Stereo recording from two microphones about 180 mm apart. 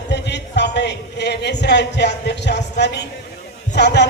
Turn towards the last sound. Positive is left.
turn(degrees=70)  # may be behind; listen again after turning